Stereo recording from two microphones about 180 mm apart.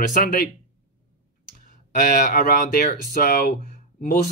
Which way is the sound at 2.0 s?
50° left (ahead or behind).